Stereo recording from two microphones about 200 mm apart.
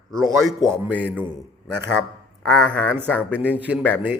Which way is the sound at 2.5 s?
5° left (ahead or behind).